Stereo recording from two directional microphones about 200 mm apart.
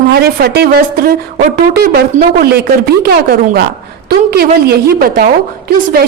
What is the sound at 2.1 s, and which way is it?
Speech, 40° right (ahead or behind).